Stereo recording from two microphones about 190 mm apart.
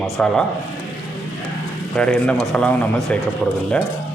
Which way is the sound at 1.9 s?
5° left (ahead or behind).